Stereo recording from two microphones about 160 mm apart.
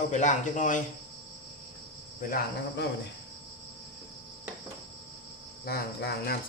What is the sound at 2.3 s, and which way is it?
Cricket, 90° left.